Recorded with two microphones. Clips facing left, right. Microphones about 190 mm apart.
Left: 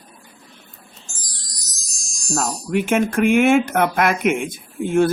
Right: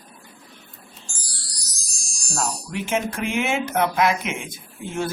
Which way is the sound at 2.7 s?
55° left (ahead or behind).